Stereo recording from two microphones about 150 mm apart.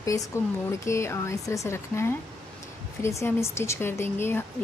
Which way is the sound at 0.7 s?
20° left (ahead or behind).